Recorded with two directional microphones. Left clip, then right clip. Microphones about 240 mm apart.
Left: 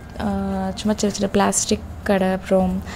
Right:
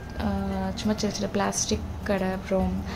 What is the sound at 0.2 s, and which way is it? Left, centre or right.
A woman's voice, centre.